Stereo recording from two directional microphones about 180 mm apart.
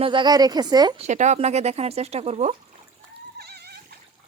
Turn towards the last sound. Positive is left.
turn(degrees=-60)  # may be behind; listen again after turning